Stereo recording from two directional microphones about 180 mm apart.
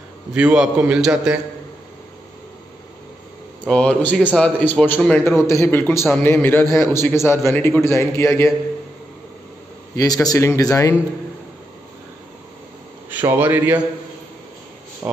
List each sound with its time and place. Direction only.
0.3 s a man's voice: 5° right (ahead or behind)
3.6 s a man's voice: 5° left (ahead or behind)
9.9 s a man's voice: 20° left (ahead or behind)
13.1 s a man's voice: 10° right (ahead or behind)